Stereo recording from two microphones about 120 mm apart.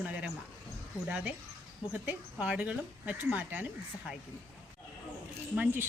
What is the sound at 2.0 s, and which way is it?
A woman's voice, 15° right (ahead or behind).